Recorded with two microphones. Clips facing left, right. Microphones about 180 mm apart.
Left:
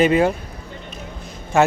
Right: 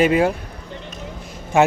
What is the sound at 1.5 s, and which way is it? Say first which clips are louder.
Speech: right 1 dB; 15° right (ahead or behind).